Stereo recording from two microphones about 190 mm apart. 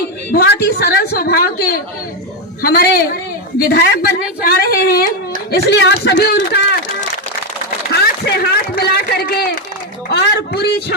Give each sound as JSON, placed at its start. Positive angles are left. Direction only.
{"t": 0.3, "sound": "a sound", "side_deg": 50}
{"t": 2.6, "sound": "a woman's voice", "side_deg": 50}
{"t": 8.0, "sound": "speech", "side_deg": 55}